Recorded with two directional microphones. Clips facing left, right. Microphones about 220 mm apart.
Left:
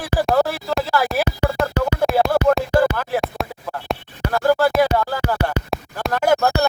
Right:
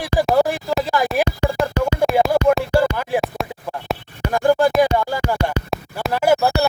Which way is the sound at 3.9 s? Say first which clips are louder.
Even; centre (ahead or behind).